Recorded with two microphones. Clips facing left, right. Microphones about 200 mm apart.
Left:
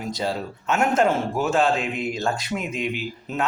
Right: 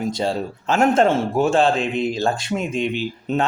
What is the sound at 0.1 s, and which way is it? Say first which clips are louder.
A man's voice: right 4 dB; 25° right (ahead or behind).